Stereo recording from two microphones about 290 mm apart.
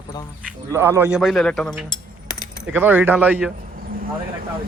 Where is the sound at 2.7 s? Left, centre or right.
Centre.